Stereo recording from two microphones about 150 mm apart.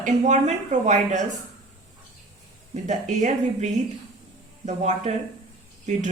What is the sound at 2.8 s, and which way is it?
A woman's voice, 55° right (ahead or behind).